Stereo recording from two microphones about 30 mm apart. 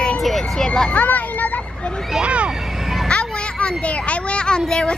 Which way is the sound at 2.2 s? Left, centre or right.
Right.